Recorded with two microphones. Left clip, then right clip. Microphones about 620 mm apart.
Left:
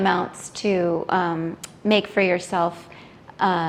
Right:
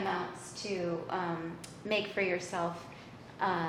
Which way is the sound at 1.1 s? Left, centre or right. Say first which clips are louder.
Left 15 dB; left.